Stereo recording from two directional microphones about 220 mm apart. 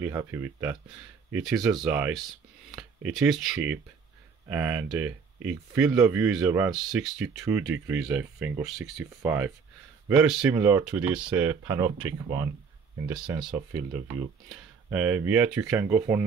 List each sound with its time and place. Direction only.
0.0 s speech: 10° right (ahead or behind)
1.6 s speech: 15° right (ahead or behind)
1.9 s speech: 5° right (ahead or behind)
13.1 s speech: 5° right (ahead or behind)
14.9 s speech: 5° right (ahead or behind)